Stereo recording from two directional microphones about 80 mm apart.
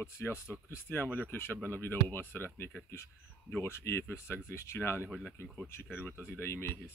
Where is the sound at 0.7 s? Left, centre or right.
Left.